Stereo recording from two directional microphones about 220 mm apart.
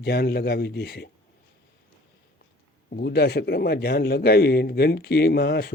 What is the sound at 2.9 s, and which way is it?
Speech, 45° left (ahead or behind).